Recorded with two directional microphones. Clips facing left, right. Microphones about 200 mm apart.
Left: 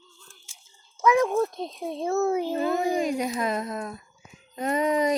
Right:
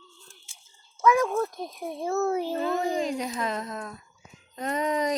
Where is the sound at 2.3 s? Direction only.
15° left (ahead or behind).